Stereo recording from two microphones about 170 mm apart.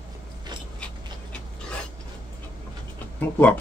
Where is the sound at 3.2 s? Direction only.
10° left (ahead or behind).